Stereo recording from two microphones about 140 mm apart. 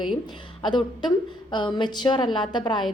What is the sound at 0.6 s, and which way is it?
A woman's voice, 35° left (ahead or behind).